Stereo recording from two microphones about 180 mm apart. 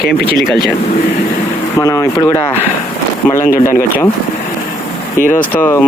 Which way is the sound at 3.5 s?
50° left (ahead or behind).